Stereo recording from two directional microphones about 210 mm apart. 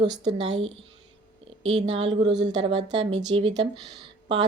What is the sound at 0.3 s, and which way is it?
Speech, 30° right (ahead or behind).